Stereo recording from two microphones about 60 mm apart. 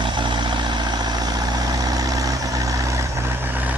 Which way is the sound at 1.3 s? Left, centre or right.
Right.